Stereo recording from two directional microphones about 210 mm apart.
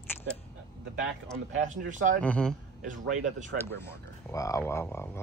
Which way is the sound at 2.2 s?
5° left (ahead or behind).